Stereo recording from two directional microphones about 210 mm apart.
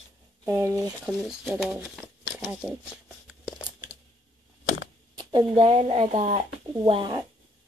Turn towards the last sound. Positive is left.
turn(degrees=-25)  # may be behind; listen again after turning